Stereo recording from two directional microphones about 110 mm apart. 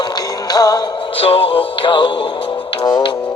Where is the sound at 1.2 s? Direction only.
60° left (ahead or behind); by 3.1 s 45° left (ahead or behind).